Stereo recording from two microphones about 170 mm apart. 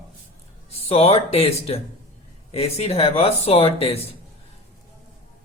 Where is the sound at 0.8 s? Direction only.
35° left (ahead or behind).